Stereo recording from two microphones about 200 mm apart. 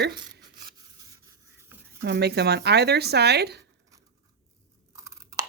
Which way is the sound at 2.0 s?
55° right (ahead or behind).